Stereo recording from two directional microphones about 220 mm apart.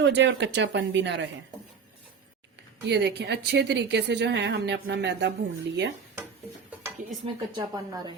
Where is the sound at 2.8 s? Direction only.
50° right (ahead or behind).